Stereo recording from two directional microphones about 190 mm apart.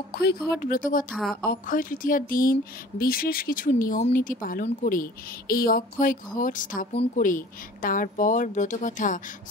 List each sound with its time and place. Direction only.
0.1 s speech: 55° left (ahead or behind)